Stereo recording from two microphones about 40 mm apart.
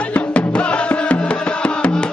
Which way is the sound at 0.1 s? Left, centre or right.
Left.